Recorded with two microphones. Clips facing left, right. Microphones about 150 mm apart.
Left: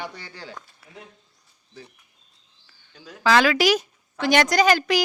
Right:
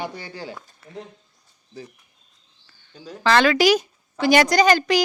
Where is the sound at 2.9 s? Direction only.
35° right (ahead or behind).